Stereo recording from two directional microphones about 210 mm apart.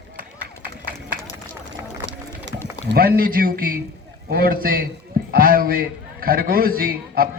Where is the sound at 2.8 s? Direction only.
50° right (ahead or behind).